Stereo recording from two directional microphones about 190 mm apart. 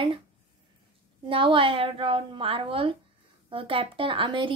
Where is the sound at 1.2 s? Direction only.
25° right (ahead or behind).